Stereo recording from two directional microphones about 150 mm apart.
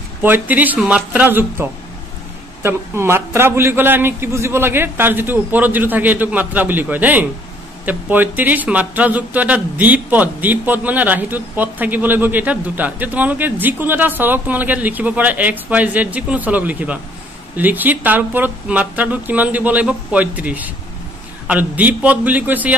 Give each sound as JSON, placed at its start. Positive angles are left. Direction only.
{"t": 0.2, "sound": "speech", "side_deg": -10}